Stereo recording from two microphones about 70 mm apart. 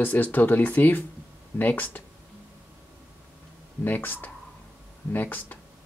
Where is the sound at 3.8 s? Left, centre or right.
Left.